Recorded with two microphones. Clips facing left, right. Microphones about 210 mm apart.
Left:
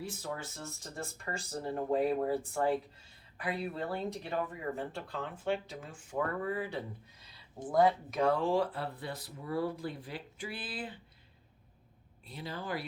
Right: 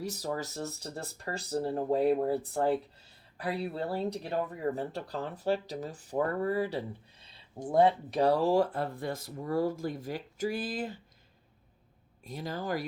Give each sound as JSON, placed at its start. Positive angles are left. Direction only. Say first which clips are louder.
{"t": 0.0, "sound": "speech", "louder": "right 5 dB", "side_deg": -40}
{"t": 12.2, "sound": "speech", "louder": "right 5 dB", "side_deg": -45}